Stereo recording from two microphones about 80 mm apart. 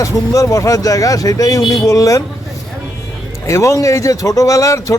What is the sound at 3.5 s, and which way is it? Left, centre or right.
A man's voice, left.